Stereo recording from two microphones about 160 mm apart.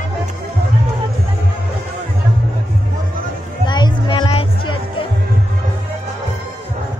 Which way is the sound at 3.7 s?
30° left (ahead or behind).